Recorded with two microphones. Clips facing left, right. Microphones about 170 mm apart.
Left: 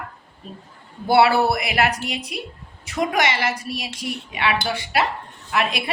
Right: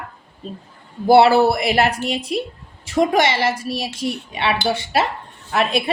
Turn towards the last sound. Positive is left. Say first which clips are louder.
# right 4 dB
turn(degrees=-30)  # may be behind; listen again after turning